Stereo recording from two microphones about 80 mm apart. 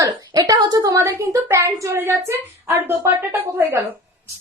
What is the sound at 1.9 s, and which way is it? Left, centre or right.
A woman's voice, right.